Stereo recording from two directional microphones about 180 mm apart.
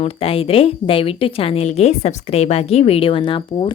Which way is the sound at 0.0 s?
30° left (ahead or behind).